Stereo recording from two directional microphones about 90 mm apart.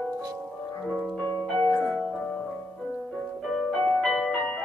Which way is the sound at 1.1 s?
20° left (ahead or behind).